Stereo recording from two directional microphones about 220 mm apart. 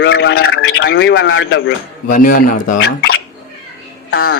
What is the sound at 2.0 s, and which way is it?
Speech, 40° left (ahead or behind).